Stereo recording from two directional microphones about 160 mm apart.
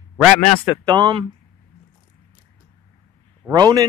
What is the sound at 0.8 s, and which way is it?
Speech, 30° right (ahead or behind).